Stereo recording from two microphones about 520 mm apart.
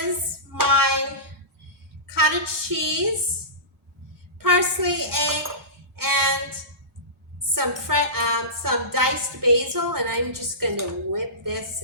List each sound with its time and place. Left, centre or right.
0.5 s music: right
2.0 s a woman's voice: right
4.4 s a woman's voice: right
6.0 s music: right
7.5 s music: right